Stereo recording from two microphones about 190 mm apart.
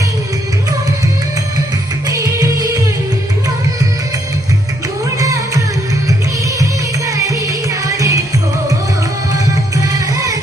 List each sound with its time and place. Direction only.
2.1 s music: 20° right (ahead or behind)
5.2 s music: 15° right (ahead or behind)
7.3 s music: 15° right (ahead or behind)